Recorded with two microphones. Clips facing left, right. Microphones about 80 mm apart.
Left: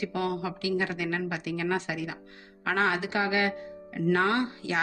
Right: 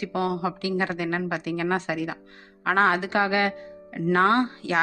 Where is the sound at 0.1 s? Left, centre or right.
Right.